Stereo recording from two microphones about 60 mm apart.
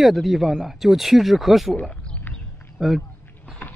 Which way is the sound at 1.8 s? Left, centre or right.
Centre.